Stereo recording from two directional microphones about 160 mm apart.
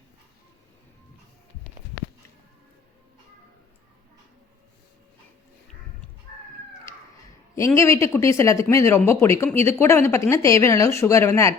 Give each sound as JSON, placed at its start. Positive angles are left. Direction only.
{"t": 7.5, "sound": "speech", "side_deg": 20}